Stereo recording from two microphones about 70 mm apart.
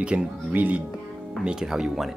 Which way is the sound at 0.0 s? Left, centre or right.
Centre.